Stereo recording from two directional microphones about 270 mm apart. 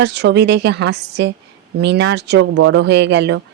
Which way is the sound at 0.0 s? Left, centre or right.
Right.